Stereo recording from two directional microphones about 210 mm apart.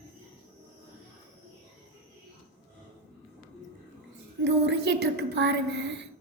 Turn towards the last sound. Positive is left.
turn(degrees=-55)  # may be behind; listen again after turning